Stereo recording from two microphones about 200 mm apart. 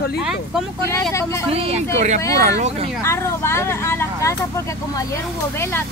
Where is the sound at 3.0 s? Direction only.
10° left (ahead or behind).